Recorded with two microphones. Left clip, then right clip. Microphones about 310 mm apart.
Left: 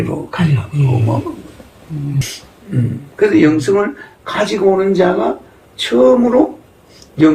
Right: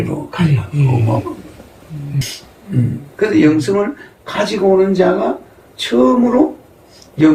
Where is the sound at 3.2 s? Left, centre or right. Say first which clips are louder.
Left 1 dB; centre.